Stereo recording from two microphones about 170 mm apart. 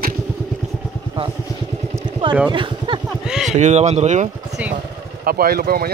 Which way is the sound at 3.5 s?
45° right (ahead or behind).